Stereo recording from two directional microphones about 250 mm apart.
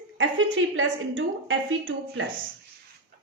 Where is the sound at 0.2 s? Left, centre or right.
Right.